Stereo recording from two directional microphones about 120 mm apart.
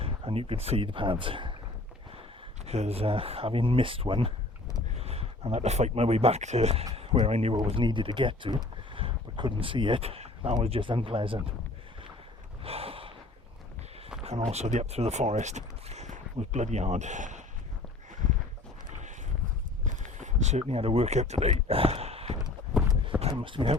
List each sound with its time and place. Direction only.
0.0 s speech: 50° right (ahead or behind)
2.6 s speech: 60° right (ahead or behind)
6.9 s a sound: 50° right (ahead or behind)
7.3 s speech: 60° right (ahead or behind); by 11.5 s 45° right (ahead or behind)
12.6 s gasp: 55° right (ahead or behind)
14.3 s speech: 65° right (ahead or behind); by 17.4 s 85° right
19.8 s a sound: 85° right; by 22.4 s 55° right (ahead or behind)
23.3 s speech: 45° right (ahead or behind)